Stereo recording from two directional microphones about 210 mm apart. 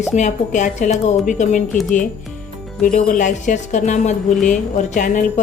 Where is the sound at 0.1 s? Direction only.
35° left (ahead or behind).